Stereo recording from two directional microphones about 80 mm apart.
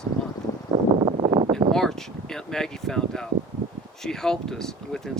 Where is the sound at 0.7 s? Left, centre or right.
Right.